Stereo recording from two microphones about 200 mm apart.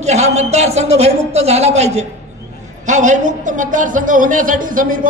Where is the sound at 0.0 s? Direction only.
35° right (ahead or behind).